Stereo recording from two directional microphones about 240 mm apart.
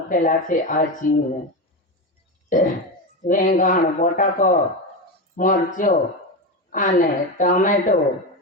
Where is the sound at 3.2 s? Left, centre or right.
Left.